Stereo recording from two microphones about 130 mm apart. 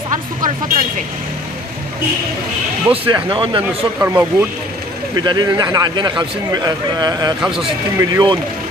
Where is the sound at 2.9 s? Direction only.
35° right (ahead or behind).